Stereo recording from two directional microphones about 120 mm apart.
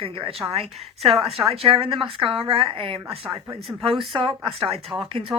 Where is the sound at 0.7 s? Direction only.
Centre (ahead or behind).